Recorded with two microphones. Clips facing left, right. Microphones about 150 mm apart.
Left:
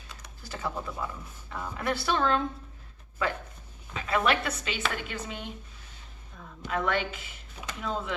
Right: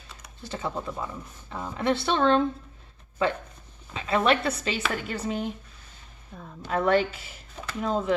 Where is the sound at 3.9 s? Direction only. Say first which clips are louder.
Right 3 dB; 25° right (ahead or behind).